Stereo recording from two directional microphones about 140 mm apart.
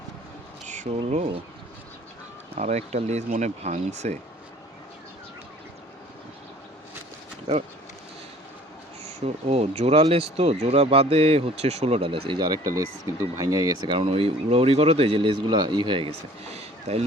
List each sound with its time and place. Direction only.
0.6 s a sound: 60° right (ahead or behind)
1.1 s speech: 40° right (ahead or behind)
2.6 s speech: 50° right (ahead or behind)
7.5 s speech: 45° right (ahead or behind)
9.2 s speech: 50° right (ahead or behind)
12.7 s speech: 20° right (ahead or behind)
16.9 s speech: 45° right (ahead or behind)